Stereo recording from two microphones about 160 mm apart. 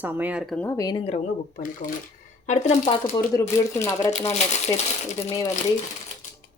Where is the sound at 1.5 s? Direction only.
55° left (ahead or behind).